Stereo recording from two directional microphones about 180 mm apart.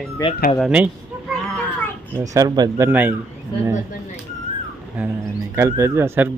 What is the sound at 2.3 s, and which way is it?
Speech, 20° right (ahead or behind).